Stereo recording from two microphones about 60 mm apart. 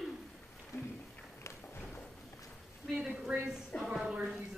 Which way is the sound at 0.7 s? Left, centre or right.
Left.